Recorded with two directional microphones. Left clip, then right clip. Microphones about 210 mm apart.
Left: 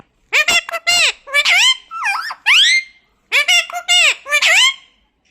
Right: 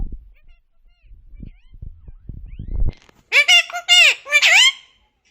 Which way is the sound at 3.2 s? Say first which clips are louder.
Even; 20° left (ahead or behind).